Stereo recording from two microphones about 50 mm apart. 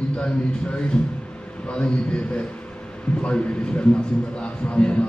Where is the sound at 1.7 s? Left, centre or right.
Left.